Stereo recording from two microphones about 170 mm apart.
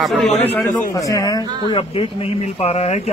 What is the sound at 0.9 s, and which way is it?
Speech, 20° left (ahead or behind).